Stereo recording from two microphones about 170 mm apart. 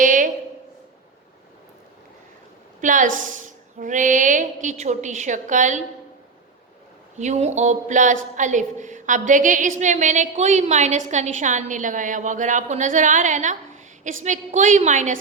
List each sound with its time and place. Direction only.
0.0 s a sound: 50° right (ahead or behind)
2.8 s a woman's voice: 50° right (ahead or behind)
7.2 s a woman's voice: 40° right (ahead or behind)